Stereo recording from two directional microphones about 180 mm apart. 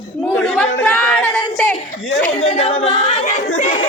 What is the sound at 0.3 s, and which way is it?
Chatter, 5° left (ahead or behind).